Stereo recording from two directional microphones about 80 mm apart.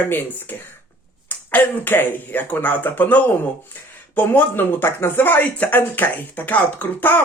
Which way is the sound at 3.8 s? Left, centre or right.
Left.